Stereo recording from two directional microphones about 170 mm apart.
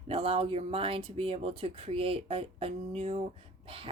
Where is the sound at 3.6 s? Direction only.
30° right (ahead or behind).